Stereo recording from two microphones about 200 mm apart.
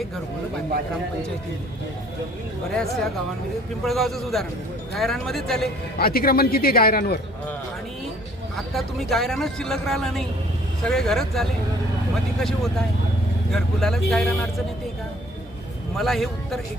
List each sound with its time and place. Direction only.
3.8 s speech: centre (ahead or behind)
6.0 s a man's voice: 50° left (ahead or behind)
8.5 s speech: centre (ahead or behind)
16.0 s speech: centre (ahead or behind)